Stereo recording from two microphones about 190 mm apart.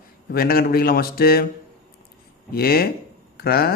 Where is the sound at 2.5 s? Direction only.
55° left (ahead or behind).